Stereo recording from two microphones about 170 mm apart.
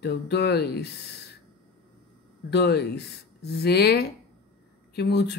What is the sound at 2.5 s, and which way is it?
Speech, 75° left (ahead or behind).